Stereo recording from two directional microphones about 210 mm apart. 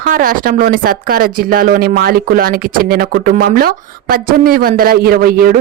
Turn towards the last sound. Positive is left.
turn(degrees=-45)  # may be behind; listen again after turning